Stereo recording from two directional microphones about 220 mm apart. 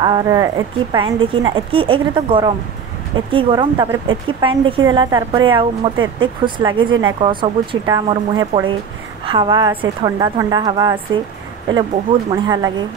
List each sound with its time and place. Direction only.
0.0 s a woman's voice: 15° right (ahead or behind)
12.3 s speech: 20° right (ahead or behind)